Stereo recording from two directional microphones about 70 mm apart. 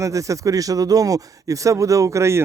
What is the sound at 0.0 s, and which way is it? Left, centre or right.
Speech, right.